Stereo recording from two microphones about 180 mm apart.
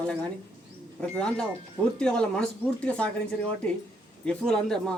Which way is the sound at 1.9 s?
5° left (ahead or behind).